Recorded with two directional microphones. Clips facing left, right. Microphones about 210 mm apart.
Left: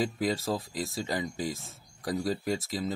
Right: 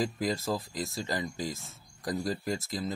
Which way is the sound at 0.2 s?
Centre (ahead or behind).